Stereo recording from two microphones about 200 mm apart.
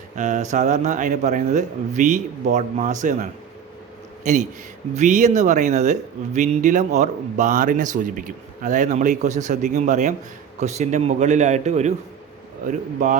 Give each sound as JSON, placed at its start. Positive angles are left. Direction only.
{"t": 0.2, "sound": "a man's voice", "side_deg": -35}